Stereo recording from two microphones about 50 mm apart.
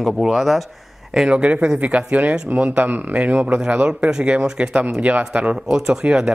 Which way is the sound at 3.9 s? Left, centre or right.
Centre.